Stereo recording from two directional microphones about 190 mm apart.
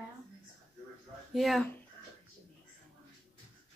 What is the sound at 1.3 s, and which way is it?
Speech, centre (ahead or behind).